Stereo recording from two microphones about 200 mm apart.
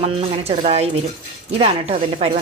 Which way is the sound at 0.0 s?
30° right (ahead or behind).